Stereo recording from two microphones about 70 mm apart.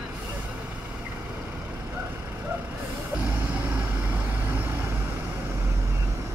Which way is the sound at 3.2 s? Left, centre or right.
Right.